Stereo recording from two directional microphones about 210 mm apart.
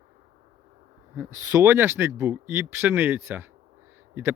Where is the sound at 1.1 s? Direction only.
15° right (ahead or behind).